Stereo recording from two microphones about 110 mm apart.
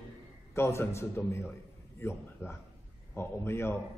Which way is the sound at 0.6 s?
25° left (ahead or behind).